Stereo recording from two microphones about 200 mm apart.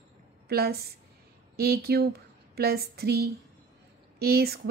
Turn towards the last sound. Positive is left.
turn(degrees=-50)  # may be behind; listen again after turning